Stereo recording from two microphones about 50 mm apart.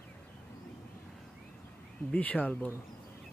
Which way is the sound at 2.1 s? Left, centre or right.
Left.